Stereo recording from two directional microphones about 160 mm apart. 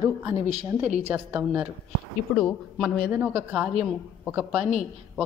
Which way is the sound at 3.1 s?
10° right (ahead or behind).